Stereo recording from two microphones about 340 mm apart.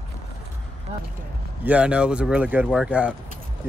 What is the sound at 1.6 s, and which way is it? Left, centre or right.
Speech, centre.